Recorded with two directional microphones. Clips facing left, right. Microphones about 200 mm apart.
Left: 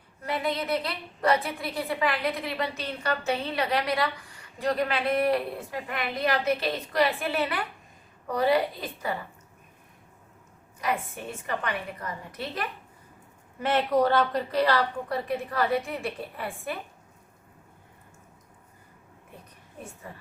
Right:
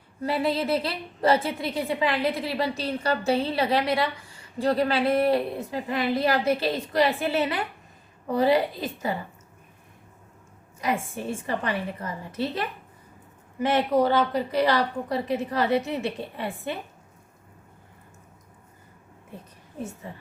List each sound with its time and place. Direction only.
0.2 s a woman's voice: 30° right (ahead or behind)
10.8 s a woman's voice: 25° right (ahead or behind)
13.6 s a woman's voice: 10° right (ahead or behind)